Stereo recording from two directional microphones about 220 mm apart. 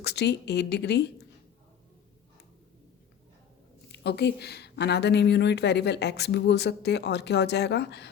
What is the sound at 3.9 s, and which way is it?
A woman's voice, 50° left (ahead or behind).